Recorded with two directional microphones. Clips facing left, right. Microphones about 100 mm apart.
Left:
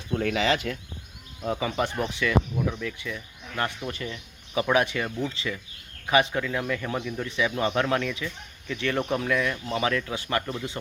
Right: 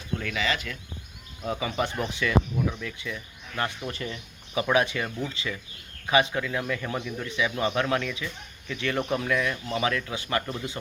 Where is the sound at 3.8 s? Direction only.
15° left (ahead or behind).